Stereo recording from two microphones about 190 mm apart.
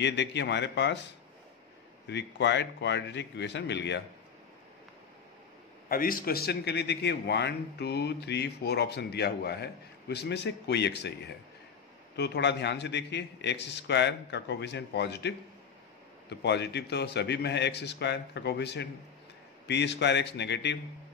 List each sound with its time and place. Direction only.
0.0 s a man's voice: 65° left (ahead or behind)
2.0 s a man's voice: 65° left (ahead or behind)
5.9 s a man's voice: 50° left (ahead or behind); by 20.8 s 65° left (ahead or behind)